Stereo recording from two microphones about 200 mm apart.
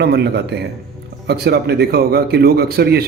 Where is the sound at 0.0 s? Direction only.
55° right (ahead or behind).